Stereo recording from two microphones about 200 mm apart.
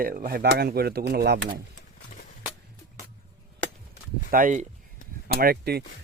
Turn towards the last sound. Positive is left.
turn(degrees=-50)  # may be behind; listen again after turning